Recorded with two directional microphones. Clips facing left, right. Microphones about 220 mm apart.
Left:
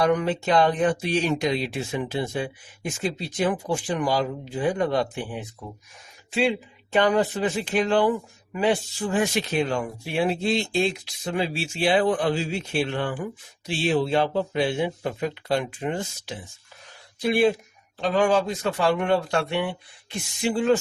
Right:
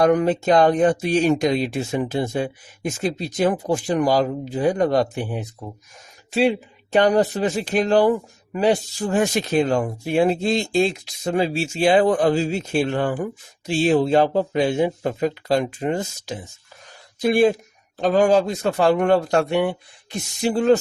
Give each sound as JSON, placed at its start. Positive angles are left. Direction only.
{"t": 0.0, "sound": "speech", "side_deg": -45}
{"t": 6.9, "sound": "speech", "side_deg": -40}